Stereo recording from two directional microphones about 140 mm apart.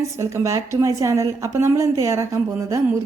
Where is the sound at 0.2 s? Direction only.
20° right (ahead or behind).